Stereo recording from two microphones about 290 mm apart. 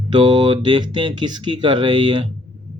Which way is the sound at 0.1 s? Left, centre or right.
Centre.